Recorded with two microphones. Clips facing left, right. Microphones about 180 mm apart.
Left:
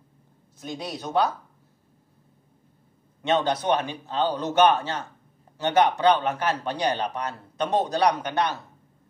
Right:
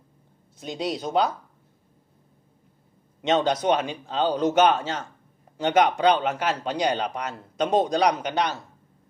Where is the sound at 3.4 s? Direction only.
15° right (ahead or behind).